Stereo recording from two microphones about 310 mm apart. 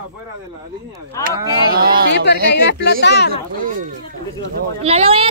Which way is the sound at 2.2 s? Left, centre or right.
Left.